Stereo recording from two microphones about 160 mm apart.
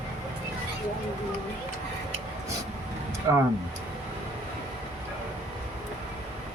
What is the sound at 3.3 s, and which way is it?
Speech, 15° right (ahead or behind).